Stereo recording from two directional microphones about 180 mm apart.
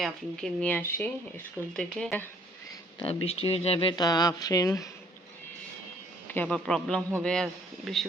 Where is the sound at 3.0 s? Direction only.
30° left (ahead or behind).